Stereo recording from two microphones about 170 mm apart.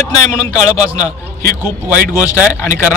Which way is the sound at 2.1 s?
20° left (ahead or behind).